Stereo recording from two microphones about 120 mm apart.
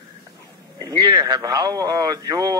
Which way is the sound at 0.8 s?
30° right (ahead or behind).